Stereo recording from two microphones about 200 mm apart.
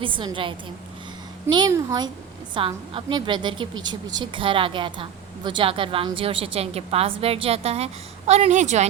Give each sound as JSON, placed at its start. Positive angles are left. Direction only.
{"t": 0.0, "sound": "a woman's voice", "side_deg": -25}